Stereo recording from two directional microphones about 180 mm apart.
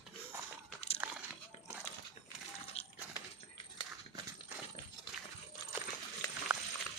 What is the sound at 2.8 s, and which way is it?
Coin, 35° left (ahead or behind).